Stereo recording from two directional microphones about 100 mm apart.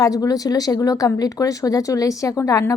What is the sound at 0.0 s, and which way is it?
A woman's voice, 35° left (ahead or behind).